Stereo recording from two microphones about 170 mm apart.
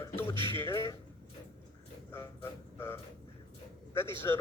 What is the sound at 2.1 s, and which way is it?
Speech, 15° left (ahead or behind).